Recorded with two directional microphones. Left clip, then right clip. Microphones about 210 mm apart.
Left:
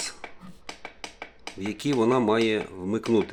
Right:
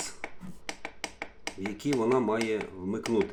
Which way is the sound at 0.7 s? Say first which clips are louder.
Right 1 dB; 10° right (ahead or behind).